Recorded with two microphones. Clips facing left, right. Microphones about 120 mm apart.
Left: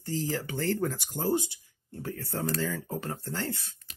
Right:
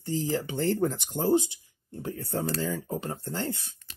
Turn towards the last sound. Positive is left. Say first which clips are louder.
# right 2 dB
turn(degrees=-20)  # may be behind; listen again after turning